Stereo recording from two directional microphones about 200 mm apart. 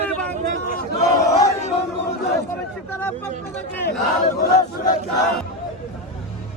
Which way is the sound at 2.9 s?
10° left (ahead or behind).